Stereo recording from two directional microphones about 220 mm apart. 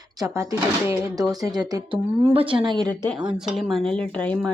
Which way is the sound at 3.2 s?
5° right (ahead or behind).